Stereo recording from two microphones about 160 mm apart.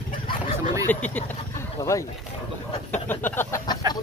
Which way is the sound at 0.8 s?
10° left (ahead or behind).